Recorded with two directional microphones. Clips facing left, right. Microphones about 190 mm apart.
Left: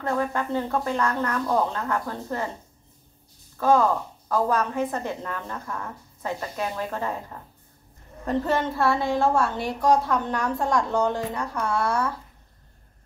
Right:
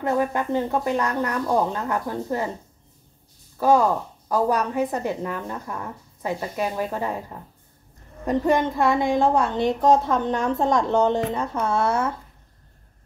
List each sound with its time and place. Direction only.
0.0 s a woman's voice: 15° right (ahead or behind)
3.5 s a woman's voice: 15° right (ahead or behind)